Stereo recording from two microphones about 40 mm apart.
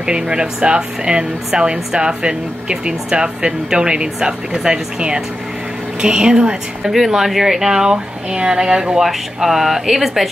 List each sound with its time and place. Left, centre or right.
0.0 s speech: right
6.8 s speech: centre
9.0 s speech: centre